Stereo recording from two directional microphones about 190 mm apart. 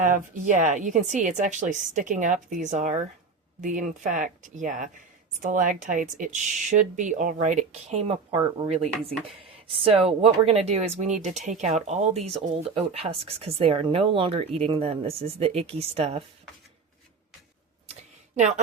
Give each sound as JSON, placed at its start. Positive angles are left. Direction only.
{"t": 0.0, "sound": "speech", "side_deg": -45}
{"t": 18.3, "sound": "speech", "side_deg": -40}